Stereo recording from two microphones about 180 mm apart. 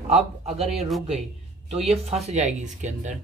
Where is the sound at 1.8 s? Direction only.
35° right (ahead or behind).